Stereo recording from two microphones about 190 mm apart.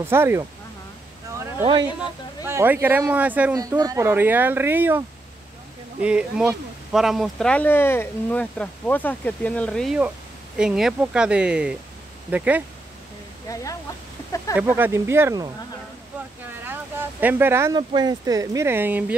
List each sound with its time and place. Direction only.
0.0 s speech: 10° right (ahead or behind)
2.0 s speech: 10° right (ahead or behind)
3.5 s speech: 20° right (ahead or behind)
13.5 s speech: 20° left (ahead or behind)
14.3 s a sound: 15° left (ahead or behind)
14.6 s speech: 10° right (ahead or behind)
16.6 s speech: 10° right (ahead or behind)